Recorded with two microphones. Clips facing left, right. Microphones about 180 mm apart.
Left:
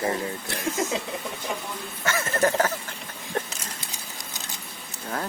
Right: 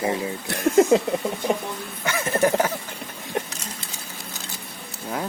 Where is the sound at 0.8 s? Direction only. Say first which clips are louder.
Right 13 dB; 60° right (ahead or behind).